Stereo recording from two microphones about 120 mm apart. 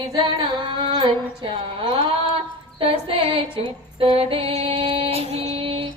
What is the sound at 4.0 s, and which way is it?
Music, 50° right (ahead or behind).